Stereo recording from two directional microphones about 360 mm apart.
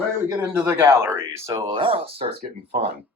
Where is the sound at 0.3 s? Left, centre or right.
Centre; by 2.9 s right.